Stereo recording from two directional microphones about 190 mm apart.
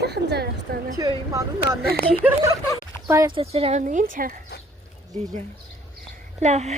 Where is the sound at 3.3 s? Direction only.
30° right (ahead or behind); by 4.3 s 45° right (ahead or behind).